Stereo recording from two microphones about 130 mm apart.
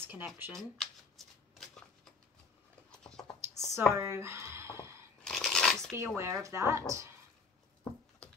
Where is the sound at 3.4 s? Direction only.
20° right (ahead or behind).